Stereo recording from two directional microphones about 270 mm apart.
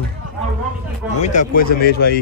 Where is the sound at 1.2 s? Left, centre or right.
Left.